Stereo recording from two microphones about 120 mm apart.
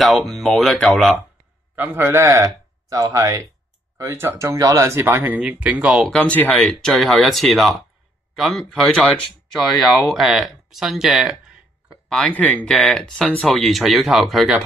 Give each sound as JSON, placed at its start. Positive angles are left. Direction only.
{"t": 0.0, "sound": "speech", "side_deg": 0}
{"t": 1.8, "sound": "speech", "side_deg": -15}
{"t": 6.0, "sound": "speech", "side_deg": 10}
{"t": 12.1, "sound": "speech", "side_deg": 10}